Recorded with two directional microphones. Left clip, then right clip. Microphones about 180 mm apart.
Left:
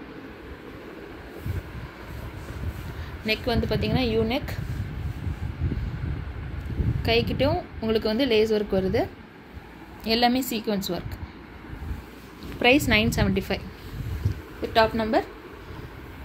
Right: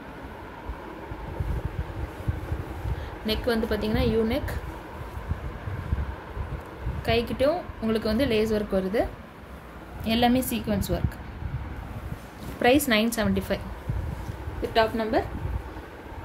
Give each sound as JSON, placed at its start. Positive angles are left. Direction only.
{"t": 3.3, "sound": "a woman's voice", "side_deg": 10}
{"t": 7.0, "sound": "a woman's voice", "side_deg": 15}
{"t": 10.0, "sound": "a woman's voice", "side_deg": 15}
{"t": 12.5, "sound": "a woman's voice", "side_deg": 5}
{"t": 14.6, "sound": "a woman's voice", "side_deg": 25}